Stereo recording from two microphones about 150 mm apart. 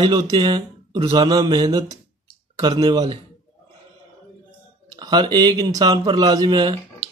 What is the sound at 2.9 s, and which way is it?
Speech, 25° right (ahead or behind).